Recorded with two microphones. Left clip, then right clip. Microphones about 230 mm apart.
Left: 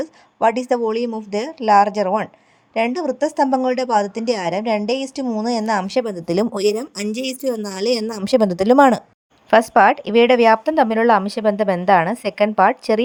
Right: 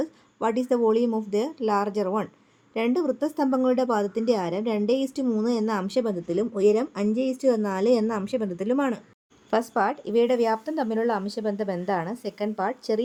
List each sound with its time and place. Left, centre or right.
0.0 s speech: centre
6.2 s speech: left
7.4 s speech: centre
7.7 s a woman's voice: left
9.5 s speech: left